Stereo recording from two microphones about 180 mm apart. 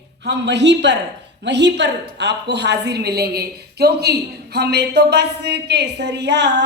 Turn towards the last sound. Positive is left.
turn(degrees=-75)  # may be behind; listen again after turning